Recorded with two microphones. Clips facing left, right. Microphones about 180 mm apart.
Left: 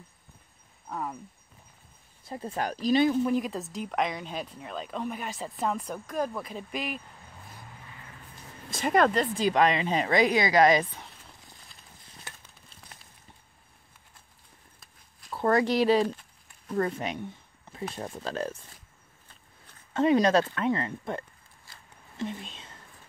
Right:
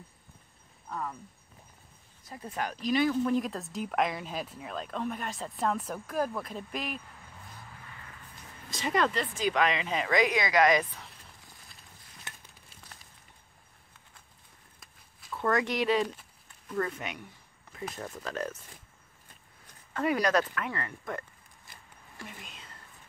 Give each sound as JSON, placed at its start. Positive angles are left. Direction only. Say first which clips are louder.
{"t": 0.8, "sound": "a sound", "louder": "left 2 dB", "side_deg": 15}
{"t": 2.2, "sound": "speech", "louder": "left 4 dB", "side_deg": 30}
{"t": 3.3, "sound": "speech", "louder": "left 1 dB", "side_deg": 0}
{"t": 8.6, "sound": "speech", "louder": "left 5 dB", "side_deg": 50}
{"t": 15.2, "sound": "speech", "louder": "left 4 dB", "side_deg": 35}
{"t": 19.9, "sound": "speech", "louder": "left 5 dB", "side_deg": 25}
{"t": 22.1, "sound": "a sound", "louder": "left 11 dB", "side_deg": 25}